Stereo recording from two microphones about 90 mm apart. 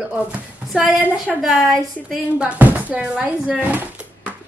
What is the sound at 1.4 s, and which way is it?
A woman's voice, 5° right (ahead or behind).